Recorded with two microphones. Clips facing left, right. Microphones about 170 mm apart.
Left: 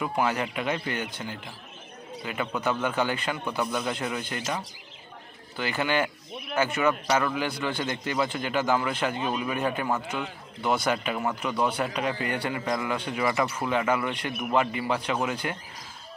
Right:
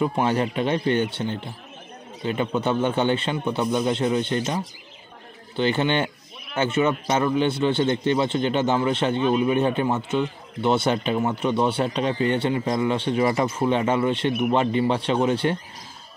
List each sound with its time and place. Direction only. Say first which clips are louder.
0.0 s a man's voice: right 5 dB; 30° right (ahead or behind)